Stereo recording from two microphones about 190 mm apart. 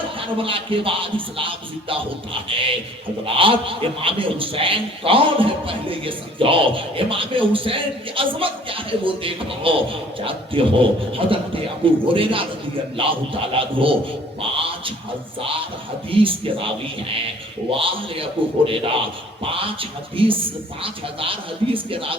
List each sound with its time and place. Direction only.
0.3 s a man's voice: 30° right (ahead or behind)
14.5 s a sound: 30° right (ahead or behind)
15.4 s a man's voice: 30° right (ahead or behind)